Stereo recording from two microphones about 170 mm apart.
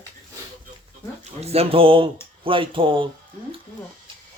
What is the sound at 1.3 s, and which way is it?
Speech, 35° right (ahead or behind).